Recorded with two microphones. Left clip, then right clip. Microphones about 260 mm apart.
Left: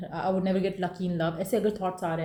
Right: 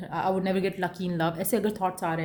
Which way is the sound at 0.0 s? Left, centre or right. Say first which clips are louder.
Right 2 dB; right.